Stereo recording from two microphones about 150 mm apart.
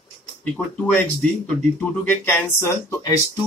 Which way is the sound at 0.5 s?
10° left (ahead or behind).